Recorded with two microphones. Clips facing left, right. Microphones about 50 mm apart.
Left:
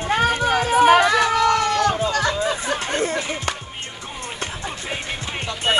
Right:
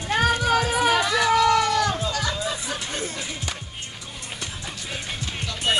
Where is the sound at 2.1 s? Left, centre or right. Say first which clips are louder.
Left 6 dB; left.